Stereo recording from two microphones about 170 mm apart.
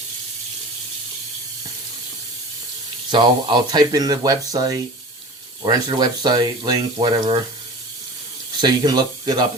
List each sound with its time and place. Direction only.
3.1 s speech: 25° right (ahead or behind)
8.6 s speech: 25° right (ahead or behind)